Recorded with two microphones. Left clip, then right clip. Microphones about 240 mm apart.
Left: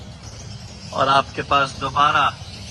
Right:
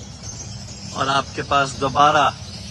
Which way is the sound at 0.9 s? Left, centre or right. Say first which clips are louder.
Left 3 dB; centre.